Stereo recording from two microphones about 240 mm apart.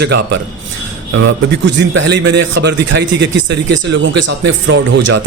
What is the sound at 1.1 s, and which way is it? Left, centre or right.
Speech, right.